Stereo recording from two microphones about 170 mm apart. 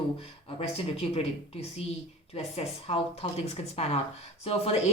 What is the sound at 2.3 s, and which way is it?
Speech, 35° left (ahead or behind).